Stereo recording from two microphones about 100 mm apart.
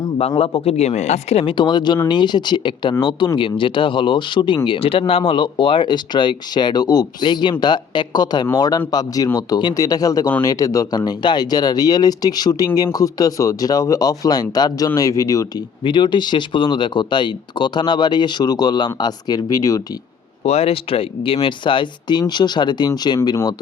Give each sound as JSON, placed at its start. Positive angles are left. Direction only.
{"t": 0.3, "sound": "speech", "side_deg": 70}
{"t": 1.5, "sound": "speech", "side_deg": 50}
{"t": 15.8, "sound": "speech", "side_deg": 50}
{"t": 20.4, "sound": "speech", "side_deg": 90}